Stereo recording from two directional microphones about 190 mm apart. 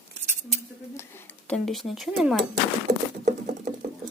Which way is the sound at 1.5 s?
Centre (ahead or behind).